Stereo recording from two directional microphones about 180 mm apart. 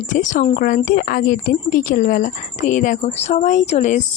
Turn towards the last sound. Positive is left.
turn(degrees=40)  # may be behind; listen again after turning